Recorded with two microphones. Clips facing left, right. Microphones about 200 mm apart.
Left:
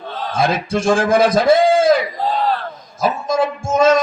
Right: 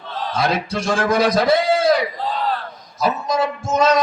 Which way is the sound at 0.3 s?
50° left (ahead or behind).